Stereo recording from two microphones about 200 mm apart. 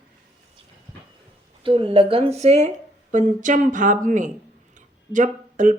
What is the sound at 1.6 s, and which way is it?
Speech, 25° right (ahead or behind).